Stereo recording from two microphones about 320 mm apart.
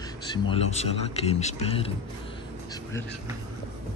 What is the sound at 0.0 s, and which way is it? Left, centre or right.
Speech, centre.